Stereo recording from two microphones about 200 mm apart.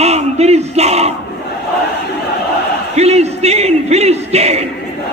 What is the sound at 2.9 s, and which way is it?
Speech, 35° right (ahead or behind).